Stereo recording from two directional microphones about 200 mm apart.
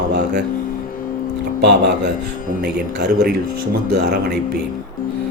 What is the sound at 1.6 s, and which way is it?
Speech, 55° right (ahead or behind).